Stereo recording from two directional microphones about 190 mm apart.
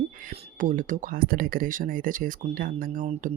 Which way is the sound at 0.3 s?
45° right (ahead or behind).